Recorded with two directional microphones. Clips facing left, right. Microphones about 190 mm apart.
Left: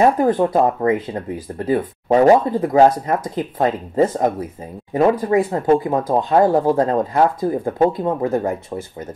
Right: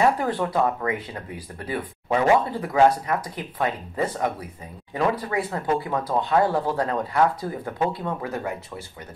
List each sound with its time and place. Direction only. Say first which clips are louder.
0.0 s speech: left 7 dB; 40° left (ahead or behind)